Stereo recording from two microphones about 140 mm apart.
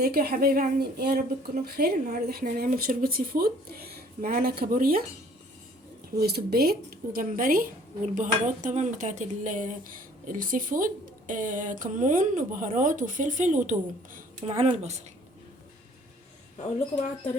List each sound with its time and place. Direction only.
0.0 s speech: 90° right
6.1 s speech: 90° right; by 14.3 s 70° right (ahead or behind)
14.4 s speech: 55° right (ahead or behind)